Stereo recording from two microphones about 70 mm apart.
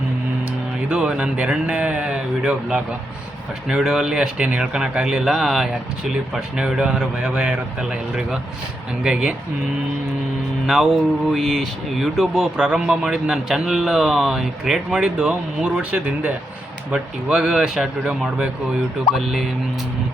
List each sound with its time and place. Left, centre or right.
0.9 s a man's voice: centre
11.3 s speech: centre
12.5 s a man's voice: centre